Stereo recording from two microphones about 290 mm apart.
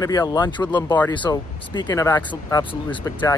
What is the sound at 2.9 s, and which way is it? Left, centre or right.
Speech, centre.